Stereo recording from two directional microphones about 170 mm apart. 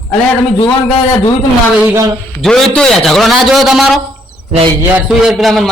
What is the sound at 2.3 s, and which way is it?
A man's voice, 5° left (ahead or behind).